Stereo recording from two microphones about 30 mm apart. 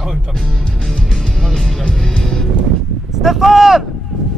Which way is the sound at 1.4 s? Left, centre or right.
Centre.